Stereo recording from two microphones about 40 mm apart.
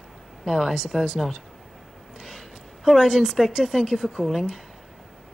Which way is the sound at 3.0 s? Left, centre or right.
Centre.